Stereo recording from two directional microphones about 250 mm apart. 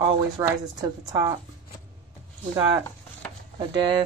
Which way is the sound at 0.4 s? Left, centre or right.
Centre.